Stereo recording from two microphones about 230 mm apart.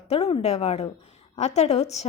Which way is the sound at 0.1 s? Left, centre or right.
Left.